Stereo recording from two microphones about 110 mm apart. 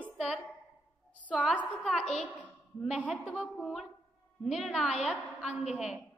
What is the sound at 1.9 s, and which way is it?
Speech, 5° left (ahead or behind).